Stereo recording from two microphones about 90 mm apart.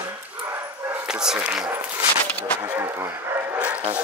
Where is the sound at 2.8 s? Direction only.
30° right (ahead or behind).